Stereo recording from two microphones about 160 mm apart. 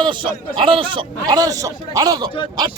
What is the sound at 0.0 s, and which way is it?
A man's voice, 30° right (ahead or behind).